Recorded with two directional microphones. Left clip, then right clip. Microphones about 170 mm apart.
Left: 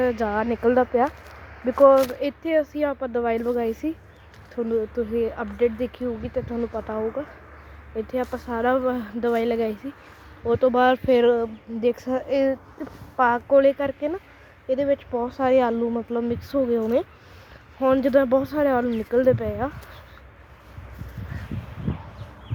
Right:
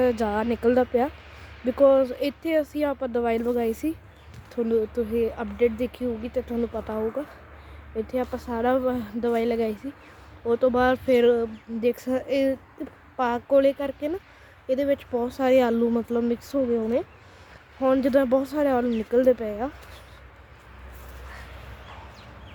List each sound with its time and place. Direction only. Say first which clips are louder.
0.0 s speech: even; 15° right (ahead or behind)
5.1 s speech: left 1 dB; 5° right (ahead or behind)
7.9 s speech: left 1 dB; 5° right (ahead or behind)
14.7 s speech: left 1 dB; 20° right (ahead or behind)
16.5 s speech: left 5 dB; centre (ahead or behind)